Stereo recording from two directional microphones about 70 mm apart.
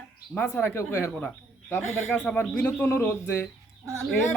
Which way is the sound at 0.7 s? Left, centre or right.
Left.